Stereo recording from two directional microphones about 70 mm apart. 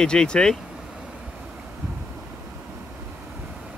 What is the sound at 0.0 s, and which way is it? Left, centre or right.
Speech, centre.